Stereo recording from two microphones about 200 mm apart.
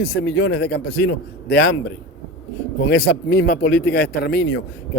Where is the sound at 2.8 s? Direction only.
60° left (ahead or behind).